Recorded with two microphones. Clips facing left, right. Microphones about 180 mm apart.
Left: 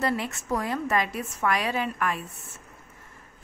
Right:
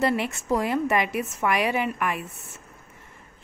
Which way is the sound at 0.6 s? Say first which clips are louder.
Right 3 dB; 15° right (ahead or behind).